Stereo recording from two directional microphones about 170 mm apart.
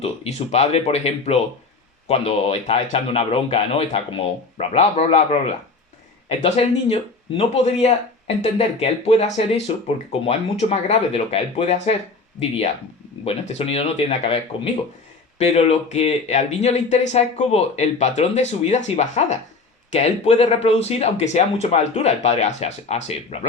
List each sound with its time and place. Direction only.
0.0 s speech: 40° left (ahead or behind)